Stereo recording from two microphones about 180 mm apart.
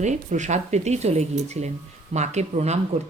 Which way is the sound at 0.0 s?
40° right (ahead or behind).